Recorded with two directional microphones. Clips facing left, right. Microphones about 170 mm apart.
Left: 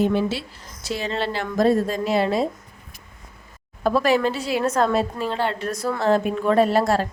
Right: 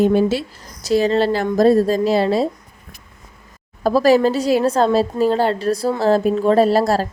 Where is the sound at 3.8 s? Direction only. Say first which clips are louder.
Right 6 dB; 35° right (ahead or behind).